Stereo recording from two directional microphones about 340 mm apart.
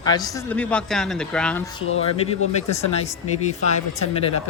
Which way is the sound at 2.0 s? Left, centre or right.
Centre.